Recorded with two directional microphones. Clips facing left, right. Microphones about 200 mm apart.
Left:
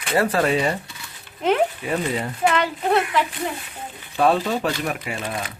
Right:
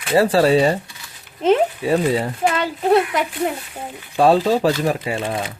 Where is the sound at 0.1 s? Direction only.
30° right (ahead or behind).